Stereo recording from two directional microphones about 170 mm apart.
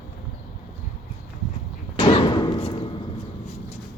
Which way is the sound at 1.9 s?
30° left (ahead or behind).